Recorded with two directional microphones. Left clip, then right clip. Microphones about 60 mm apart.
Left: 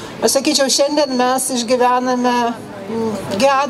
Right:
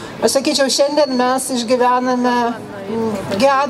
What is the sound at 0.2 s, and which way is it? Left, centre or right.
Speech, left.